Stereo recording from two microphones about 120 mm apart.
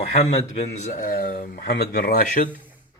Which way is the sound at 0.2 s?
65° left (ahead or behind).